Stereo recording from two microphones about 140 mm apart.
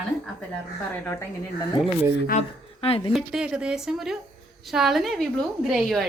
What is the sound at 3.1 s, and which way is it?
A woman's voice, 5° right (ahead or behind).